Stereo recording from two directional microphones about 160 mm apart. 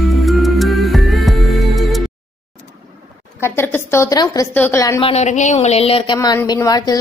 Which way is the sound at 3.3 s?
15° left (ahead or behind).